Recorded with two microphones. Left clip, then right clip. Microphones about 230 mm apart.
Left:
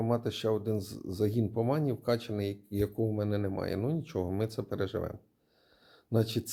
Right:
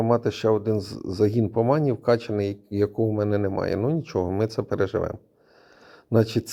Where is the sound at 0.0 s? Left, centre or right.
Right.